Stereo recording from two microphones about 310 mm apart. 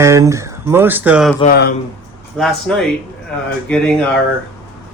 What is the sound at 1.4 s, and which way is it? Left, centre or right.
Speech, left.